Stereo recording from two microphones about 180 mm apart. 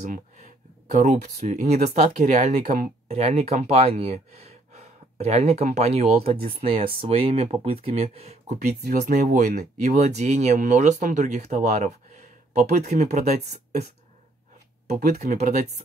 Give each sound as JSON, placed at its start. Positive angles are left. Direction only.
{"t": 0.0, "sound": "a sound", "side_deg": -45}
{"t": 0.9, "sound": "speech", "side_deg": -45}
{"t": 8.8, "sound": "speech", "side_deg": -65}
{"t": 9.1, "sound": "speech", "side_deg": -45}
{"t": 14.9, "sound": "speech", "side_deg": -45}